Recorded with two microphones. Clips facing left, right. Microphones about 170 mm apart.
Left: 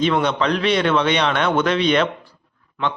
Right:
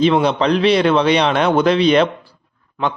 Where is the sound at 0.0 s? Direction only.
30° right (ahead or behind).